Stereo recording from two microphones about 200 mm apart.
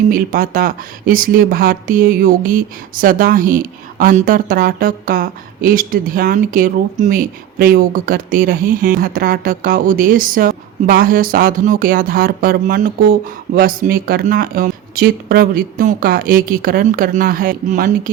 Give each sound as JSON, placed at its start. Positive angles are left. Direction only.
{"t": 0.1, "sound": "speech", "side_deg": -45}